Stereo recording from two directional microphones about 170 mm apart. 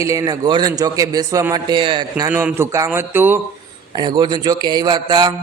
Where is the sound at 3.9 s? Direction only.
25° right (ahead or behind).